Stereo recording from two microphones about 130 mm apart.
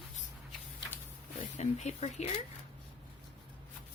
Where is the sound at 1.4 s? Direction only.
65° left (ahead or behind).